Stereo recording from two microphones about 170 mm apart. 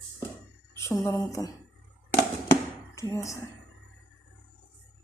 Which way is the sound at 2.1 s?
15° left (ahead or behind).